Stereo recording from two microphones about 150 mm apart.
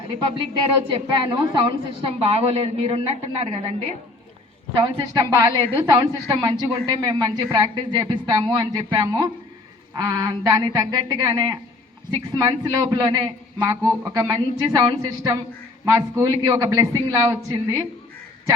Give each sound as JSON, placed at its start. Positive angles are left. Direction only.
{"t": 0.5, "sound": "speech", "side_deg": -30}
{"t": 2.0, "sound": "a woman's voice", "side_deg": -40}
{"t": 4.7, "sound": "speech", "side_deg": -30}
{"t": 6.7, "sound": "a woman's voice", "side_deg": -40}